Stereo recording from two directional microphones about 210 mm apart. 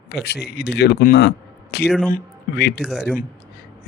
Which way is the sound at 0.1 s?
50° left (ahead or behind).